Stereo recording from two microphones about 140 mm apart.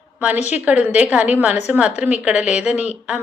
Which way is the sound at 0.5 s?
10° right (ahead or behind).